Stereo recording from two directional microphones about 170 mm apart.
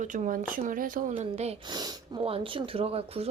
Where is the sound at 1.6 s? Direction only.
25° right (ahead or behind).